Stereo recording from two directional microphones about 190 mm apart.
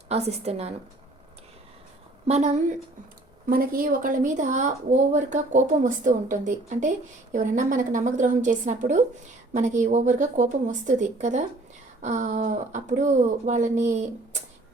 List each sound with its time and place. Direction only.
0.1 s speech: 35° right (ahead or behind)
2.2 s speech: 35° right (ahead or behind)
3.5 s speech: 50° right (ahead or behind)